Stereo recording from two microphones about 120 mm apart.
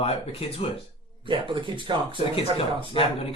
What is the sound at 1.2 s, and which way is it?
Speech, 45° right (ahead or behind).